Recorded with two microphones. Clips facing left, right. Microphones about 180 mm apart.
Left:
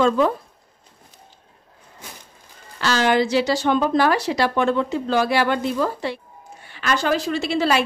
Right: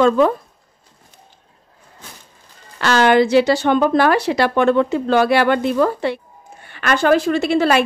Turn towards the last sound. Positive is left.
turn(degrees=-55)  # may be behind; listen again after turning